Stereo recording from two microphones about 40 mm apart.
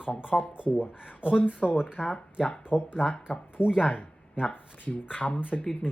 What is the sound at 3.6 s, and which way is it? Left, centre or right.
Speech, left.